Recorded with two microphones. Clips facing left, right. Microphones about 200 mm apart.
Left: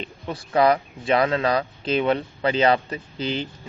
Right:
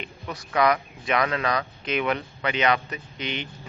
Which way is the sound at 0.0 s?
30° left (ahead or behind).